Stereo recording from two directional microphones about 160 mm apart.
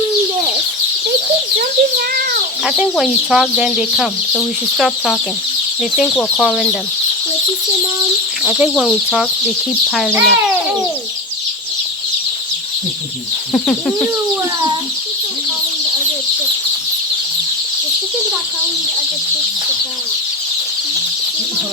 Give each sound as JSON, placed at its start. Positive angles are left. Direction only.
{"t": 1.5, "sound": "a child's voice", "side_deg": -70}
{"t": 2.6, "sound": "speech", "side_deg": -5}
{"t": 8.4, "sound": "speech", "side_deg": -5}
{"t": 13.5, "sound": "speech", "side_deg": 0}